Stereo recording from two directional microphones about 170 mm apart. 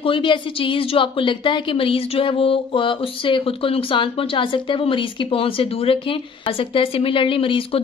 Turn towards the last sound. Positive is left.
turn(degrees=35)  # may be behind; listen again after turning